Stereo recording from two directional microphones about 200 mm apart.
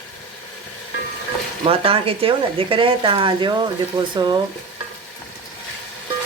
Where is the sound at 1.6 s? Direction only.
30° right (ahead or behind).